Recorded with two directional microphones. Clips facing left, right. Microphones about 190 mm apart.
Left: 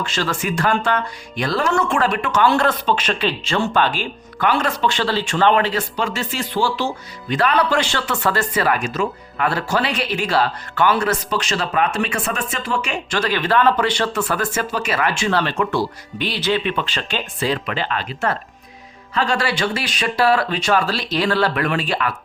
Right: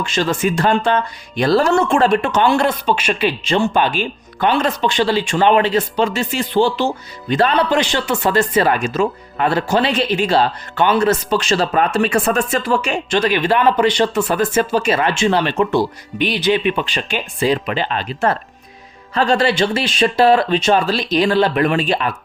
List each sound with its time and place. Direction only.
0.0 s speech: 20° right (ahead or behind); by 13.0 s 35° right (ahead or behind)
13.1 s speech: 20° right (ahead or behind)